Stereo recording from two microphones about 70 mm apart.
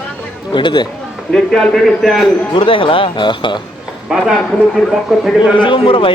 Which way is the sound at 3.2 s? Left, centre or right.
Left.